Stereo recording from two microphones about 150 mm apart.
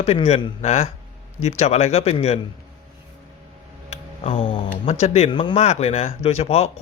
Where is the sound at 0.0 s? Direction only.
40° left (ahead or behind).